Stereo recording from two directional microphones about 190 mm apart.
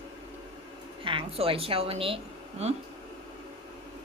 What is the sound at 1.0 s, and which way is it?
A woman's voice, 30° right (ahead or behind).